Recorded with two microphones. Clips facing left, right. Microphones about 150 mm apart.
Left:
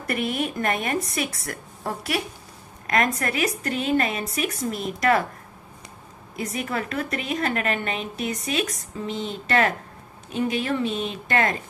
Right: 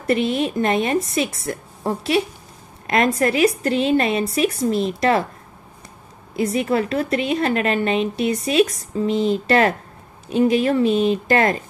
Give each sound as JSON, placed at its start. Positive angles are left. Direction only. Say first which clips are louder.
{"t": 0.0, "sound": "a woman's voice", "louder": "right 7 dB", "side_deg": -25}
{"t": 6.3, "sound": "a woman's voice", "louder": "right 9 dB", "side_deg": -30}